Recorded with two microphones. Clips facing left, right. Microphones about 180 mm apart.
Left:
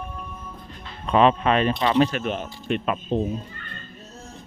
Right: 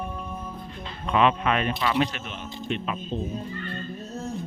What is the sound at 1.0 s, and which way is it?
Speech, 35° left (ahead or behind).